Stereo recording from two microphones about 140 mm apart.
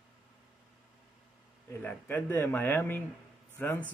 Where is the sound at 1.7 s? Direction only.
15° left (ahead or behind).